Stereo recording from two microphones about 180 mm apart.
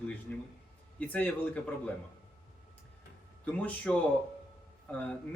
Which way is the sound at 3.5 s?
5° left (ahead or behind).